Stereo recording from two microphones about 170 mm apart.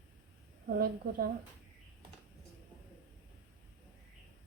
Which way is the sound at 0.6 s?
60° right (ahead or behind).